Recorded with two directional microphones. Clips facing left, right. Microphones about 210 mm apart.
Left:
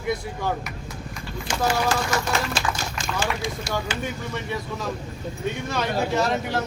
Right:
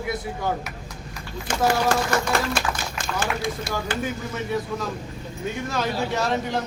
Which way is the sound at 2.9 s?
55° right (ahead or behind).